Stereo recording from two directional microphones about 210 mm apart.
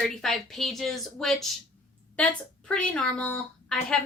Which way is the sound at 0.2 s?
Centre (ahead or behind).